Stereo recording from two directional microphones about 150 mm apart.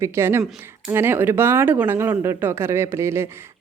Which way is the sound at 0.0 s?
15° right (ahead or behind).